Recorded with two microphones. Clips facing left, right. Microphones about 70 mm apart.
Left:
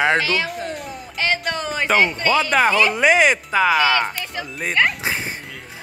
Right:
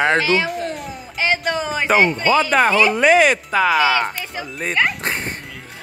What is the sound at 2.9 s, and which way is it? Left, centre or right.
Speech, centre.